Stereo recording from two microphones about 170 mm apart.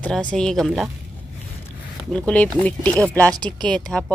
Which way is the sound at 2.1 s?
5° left (ahead or behind).